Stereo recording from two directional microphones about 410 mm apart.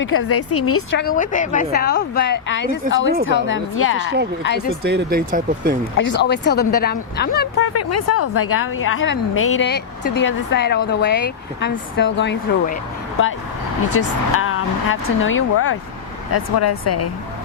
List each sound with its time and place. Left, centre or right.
0.0 s a woman's voice: left
3.9 s speech: right
4.4 s a woman's voice: left
4.8 s speech: right
6.0 s a woman's voice: left
7.7 s a woman's voice: left
13.9 s speech: left